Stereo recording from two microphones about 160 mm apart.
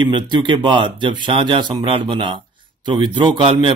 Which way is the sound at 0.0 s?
30° right (ahead or behind).